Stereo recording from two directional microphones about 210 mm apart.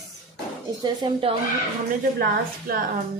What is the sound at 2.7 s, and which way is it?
Speech, 45° right (ahead or behind).